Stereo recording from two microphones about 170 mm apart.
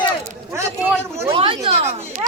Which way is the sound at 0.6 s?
15° right (ahead or behind).